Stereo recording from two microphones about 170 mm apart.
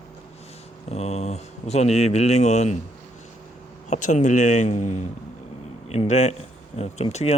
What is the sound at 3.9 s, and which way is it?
Speech, 45° left (ahead or behind).